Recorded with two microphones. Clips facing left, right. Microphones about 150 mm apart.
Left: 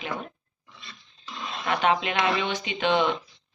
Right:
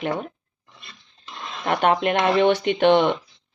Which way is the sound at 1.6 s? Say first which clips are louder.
Right 5 dB; 50° right (ahead or behind).